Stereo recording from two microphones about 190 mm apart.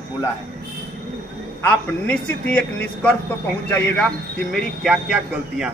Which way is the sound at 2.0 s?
5° left (ahead or behind).